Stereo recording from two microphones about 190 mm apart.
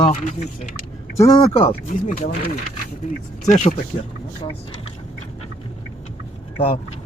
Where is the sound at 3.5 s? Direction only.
40° left (ahead or behind).